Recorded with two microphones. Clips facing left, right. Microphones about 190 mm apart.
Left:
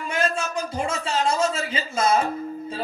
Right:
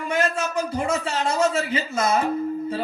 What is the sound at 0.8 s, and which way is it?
Speech, 30° left (ahead or behind).